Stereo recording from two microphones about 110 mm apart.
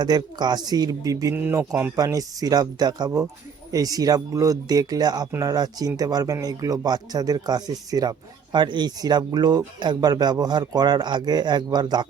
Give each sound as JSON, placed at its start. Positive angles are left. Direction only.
{"t": 0.0, "sound": "speech", "side_deg": -40}